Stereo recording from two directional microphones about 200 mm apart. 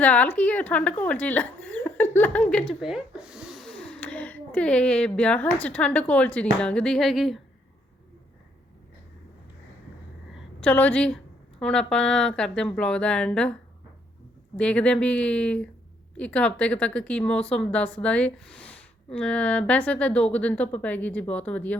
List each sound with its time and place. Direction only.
0.0 s a woman's voice: 5° left (ahead or behind)
10.3 s a woman's voice: 5° left (ahead or behind)
14.5 s a woman's voice: 5° left (ahead or behind)